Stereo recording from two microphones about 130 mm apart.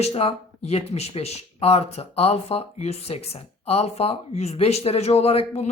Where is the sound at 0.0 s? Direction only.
50° left (ahead or behind).